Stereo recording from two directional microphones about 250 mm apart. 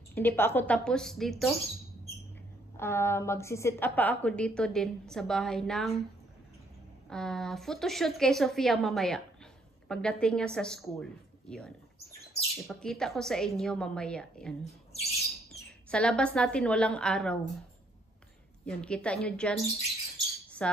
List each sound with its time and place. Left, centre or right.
0.1 s a woman's voice: centre
2.8 s a woman's voice: centre
7.1 s a woman's voice: centre
14.6 s speech: left
15.5 s a sound: centre
16.3 s a woman's voice: centre
18.7 s a woman's voice: centre